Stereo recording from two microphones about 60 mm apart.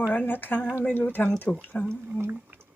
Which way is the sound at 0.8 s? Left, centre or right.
Left.